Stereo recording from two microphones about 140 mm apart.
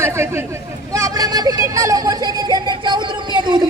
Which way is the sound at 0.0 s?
20° right (ahead or behind).